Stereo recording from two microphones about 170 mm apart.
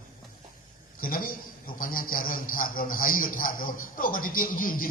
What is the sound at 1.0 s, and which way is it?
A man's voice, 55° left (ahead or behind).